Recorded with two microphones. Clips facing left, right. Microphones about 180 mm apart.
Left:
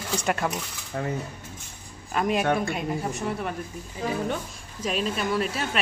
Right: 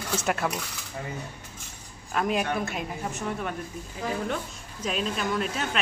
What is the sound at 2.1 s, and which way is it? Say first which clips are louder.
A woman's voice: left 3 dB; centre (ahead or behind).